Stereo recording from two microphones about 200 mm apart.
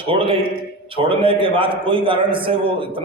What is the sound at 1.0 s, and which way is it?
A man's voice, 25° right (ahead or behind).